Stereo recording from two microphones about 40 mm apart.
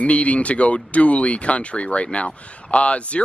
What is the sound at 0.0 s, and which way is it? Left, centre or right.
Speech, left.